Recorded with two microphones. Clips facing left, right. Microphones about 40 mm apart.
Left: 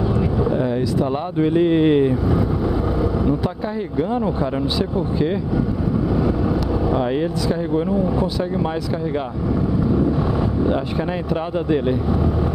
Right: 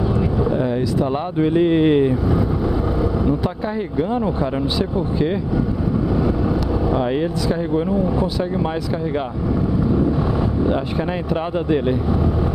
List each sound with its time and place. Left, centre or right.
0.6 s speech: centre
6.9 s speech: centre
10.6 s speech: centre